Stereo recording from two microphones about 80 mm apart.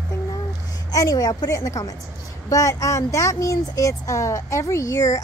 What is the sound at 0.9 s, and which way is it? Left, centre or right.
Speech, left.